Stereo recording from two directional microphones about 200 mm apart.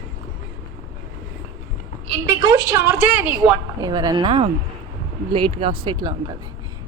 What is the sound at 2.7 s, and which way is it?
Speech, 10° right (ahead or behind).